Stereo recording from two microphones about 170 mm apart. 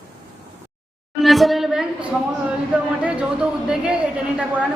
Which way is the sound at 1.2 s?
Centre (ahead or behind).